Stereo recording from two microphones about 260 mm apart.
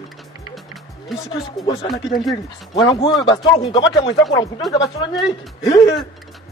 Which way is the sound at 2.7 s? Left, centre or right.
Centre.